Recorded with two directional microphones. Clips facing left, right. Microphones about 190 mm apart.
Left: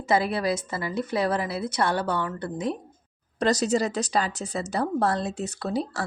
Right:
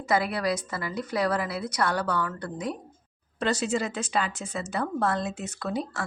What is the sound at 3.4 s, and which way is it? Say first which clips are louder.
Speech: left 4 dB; 40° left (ahead or behind).